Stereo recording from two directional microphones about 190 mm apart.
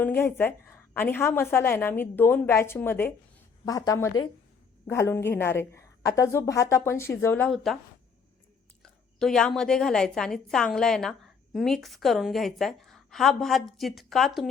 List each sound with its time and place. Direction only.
0.0 s a woman's voice: 10° left (ahead or behind)
8.8 s a woman's voice: 5° left (ahead or behind)